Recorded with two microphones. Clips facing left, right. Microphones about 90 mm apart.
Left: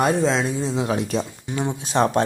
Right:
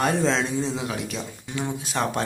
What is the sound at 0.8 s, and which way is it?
Speech, 35° left (ahead or behind).